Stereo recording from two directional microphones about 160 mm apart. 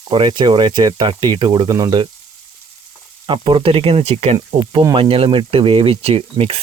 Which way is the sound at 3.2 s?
35° right (ahead or behind).